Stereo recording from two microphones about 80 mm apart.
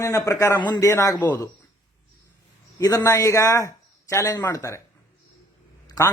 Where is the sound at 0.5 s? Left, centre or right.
Left.